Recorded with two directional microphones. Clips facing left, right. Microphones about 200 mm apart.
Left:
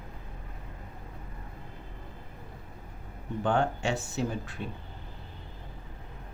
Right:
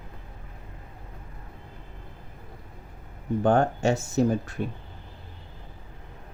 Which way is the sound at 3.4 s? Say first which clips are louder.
Right 6 dB; 45° right (ahead or behind).